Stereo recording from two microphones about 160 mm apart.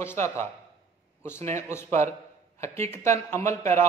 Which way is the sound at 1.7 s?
15° left (ahead or behind).